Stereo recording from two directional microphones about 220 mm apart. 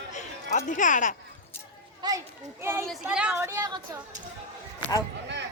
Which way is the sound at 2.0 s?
20° right (ahead or behind).